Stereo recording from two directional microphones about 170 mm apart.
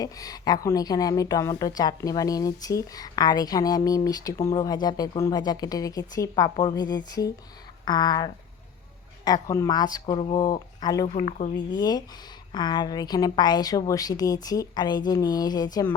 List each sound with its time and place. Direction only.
0.0 s speech: 20° left (ahead or behind)
11.1 s speech: 45° left (ahead or behind)
11.5 s speech: 25° left (ahead or behind)